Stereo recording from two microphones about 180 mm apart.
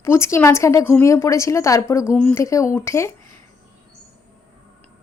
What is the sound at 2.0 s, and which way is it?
A woman's voice, 5° left (ahead or behind).